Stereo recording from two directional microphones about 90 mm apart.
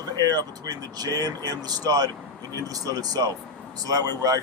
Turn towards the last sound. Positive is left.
turn(degrees=-40)  # may be behind; listen again after turning